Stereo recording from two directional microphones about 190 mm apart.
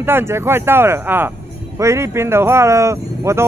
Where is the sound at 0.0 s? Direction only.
10° right (ahead or behind).